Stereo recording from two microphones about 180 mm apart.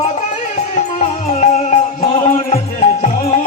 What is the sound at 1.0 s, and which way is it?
Music, 40° left (ahead or behind).